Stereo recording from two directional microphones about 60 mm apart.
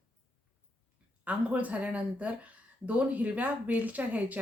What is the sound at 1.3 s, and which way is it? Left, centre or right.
Speech, right.